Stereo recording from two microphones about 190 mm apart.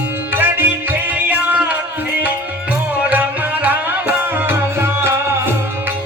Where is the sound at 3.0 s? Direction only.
10° right (ahead or behind).